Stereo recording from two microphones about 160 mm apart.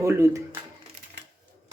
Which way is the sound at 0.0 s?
15° right (ahead or behind).